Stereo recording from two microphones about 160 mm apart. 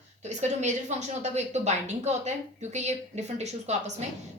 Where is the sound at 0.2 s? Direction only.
45° right (ahead or behind).